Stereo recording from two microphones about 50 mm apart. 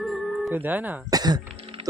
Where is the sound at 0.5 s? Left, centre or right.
Right.